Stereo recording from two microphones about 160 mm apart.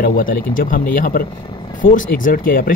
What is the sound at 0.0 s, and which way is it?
Speech, 60° left (ahead or behind).